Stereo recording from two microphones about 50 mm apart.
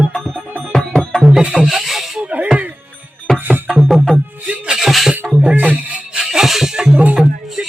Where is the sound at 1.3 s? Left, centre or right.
Centre.